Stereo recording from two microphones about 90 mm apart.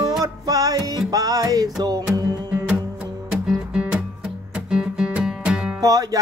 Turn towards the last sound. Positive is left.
turn(degrees=-40)  # may be behind; listen again after turning